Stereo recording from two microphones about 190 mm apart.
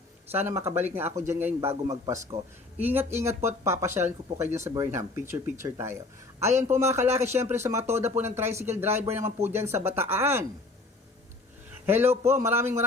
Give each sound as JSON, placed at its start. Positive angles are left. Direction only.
{"t": 0.3, "sound": "speech", "side_deg": -10}
{"t": 7.2, "sound": "speech", "side_deg": -35}
{"t": 7.5, "sound": "speech", "side_deg": -15}
{"t": 11.9, "sound": "speech", "side_deg": -10}